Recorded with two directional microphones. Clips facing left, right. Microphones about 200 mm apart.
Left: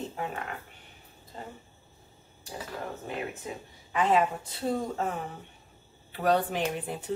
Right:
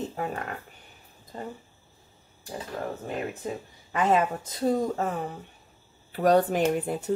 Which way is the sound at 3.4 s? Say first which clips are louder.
Right 5 dB; 45° right (ahead or behind).